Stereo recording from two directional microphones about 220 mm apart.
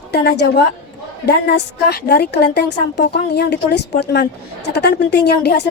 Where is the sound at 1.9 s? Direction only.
45° left (ahead or behind).